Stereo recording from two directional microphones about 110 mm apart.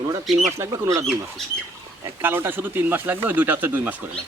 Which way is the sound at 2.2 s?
20° right (ahead or behind).